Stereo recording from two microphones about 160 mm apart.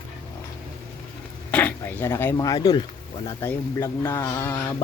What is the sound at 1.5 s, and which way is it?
Speech, 10° left (ahead or behind).